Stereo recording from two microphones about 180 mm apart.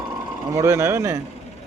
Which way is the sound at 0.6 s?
15° right (ahead or behind).